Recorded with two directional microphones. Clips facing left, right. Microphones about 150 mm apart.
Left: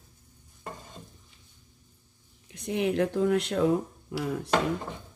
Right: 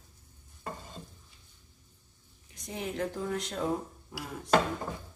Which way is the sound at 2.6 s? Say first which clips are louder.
Left 8 dB; 70° left (ahead or behind).